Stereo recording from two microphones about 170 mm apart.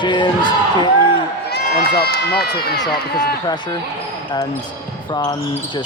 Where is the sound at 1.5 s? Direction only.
65° left (ahead or behind).